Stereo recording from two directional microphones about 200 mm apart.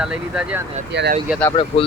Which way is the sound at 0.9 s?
60° right (ahead or behind).